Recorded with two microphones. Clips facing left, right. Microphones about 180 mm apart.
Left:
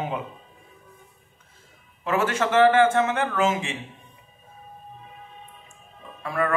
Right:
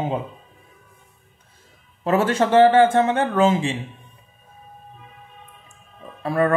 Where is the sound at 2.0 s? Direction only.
35° right (ahead or behind).